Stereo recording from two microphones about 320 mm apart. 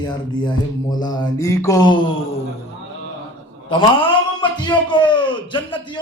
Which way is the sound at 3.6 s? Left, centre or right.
Centre.